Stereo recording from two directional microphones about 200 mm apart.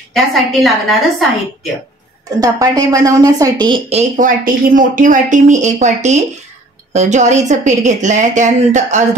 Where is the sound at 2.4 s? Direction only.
15° right (ahead or behind).